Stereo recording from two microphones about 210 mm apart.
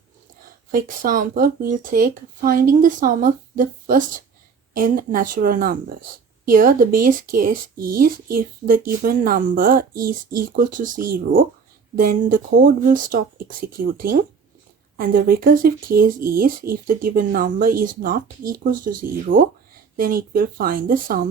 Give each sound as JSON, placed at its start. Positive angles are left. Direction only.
{"t": 0.7, "sound": "speech", "side_deg": -40}